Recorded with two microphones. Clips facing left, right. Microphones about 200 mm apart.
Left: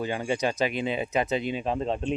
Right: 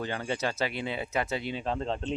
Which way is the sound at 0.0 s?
15° left (ahead or behind).